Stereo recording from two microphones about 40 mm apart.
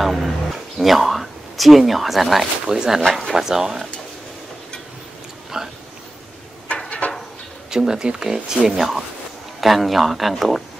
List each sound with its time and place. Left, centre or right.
0.0 s speech: centre
2.6 s speech: centre
3.0 s speech: centre
3.3 s speech: centre
5.5 s a sound: centre
6.7 s a sound: left
7.7 s speech: centre